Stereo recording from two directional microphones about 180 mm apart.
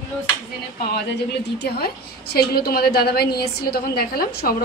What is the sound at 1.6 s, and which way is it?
A woman's voice, 60° left (ahead or behind).